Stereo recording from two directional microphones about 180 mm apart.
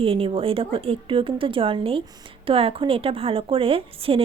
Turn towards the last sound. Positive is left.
turn(degrees=-30)  # may be behind; listen again after turning